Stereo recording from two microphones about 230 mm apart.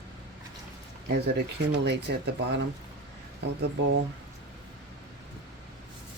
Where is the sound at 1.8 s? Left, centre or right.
Right.